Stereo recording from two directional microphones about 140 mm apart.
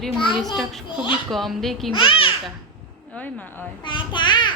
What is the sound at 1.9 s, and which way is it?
Speech, 40° left (ahead or behind).